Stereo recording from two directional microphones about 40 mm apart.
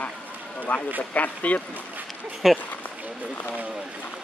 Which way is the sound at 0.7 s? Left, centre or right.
Left.